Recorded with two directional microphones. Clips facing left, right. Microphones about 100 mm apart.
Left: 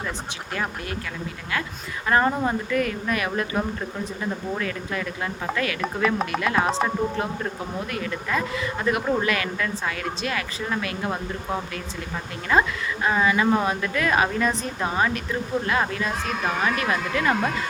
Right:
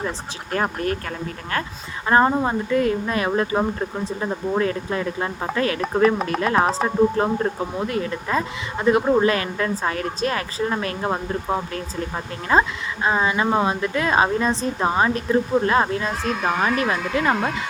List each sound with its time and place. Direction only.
0.5 s speech: 45° right (ahead or behind)
2.0 s speech: 25° right (ahead or behind)
16.0 s speech: centre (ahead or behind)